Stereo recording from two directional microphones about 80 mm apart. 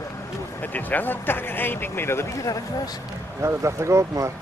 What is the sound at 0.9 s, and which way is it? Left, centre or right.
Speech, left.